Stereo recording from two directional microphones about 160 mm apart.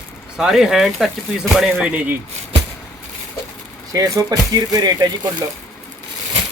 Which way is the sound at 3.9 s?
20° right (ahead or behind).